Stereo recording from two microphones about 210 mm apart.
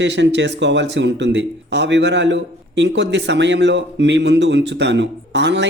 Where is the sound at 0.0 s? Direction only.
55° right (ahead or behind).